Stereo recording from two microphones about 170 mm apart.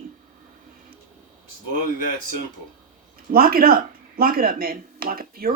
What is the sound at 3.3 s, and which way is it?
Speech, 60° right (ahead or behind).